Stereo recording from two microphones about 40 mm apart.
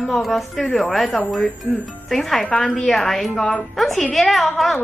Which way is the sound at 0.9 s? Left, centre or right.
Centre.